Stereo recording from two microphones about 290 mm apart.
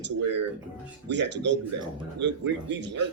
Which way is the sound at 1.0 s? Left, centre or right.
Right.